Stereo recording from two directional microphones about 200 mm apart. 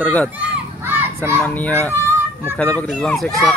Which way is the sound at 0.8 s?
10° right (ahead or behind).